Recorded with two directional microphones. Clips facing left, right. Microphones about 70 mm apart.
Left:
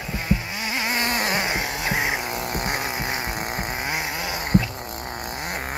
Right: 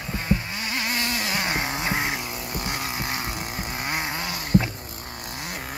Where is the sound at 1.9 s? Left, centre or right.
Centre.